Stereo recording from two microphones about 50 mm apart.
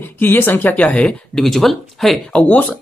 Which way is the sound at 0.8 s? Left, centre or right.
Left.